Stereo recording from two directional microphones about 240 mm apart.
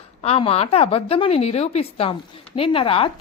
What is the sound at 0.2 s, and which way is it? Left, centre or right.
A woman's voice, left.